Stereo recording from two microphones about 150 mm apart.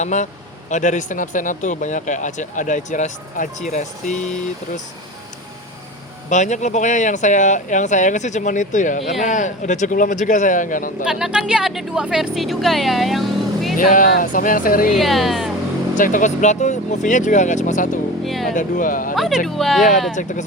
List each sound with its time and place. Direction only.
0.0 s speech: 55° left (ahead or behind)
6.3 s speech: 55° left (ahead or behind)
11.0 s speech: 5° right (ahead or behind)
13.7 s speech: 60° left (ahead or behind)
14.9 s speech: centre (ahead or behind)
16.0 s speech: 60° left (ahead or behind)
18.3 s speech: centre (ahead or behind)
18.5 s speech: 65° left (ahead or behind)
19.1 s speech: centre (ahead or behind)